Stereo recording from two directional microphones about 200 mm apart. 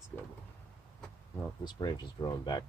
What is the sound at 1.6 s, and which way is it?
Speech, 20° left (ahead or behind).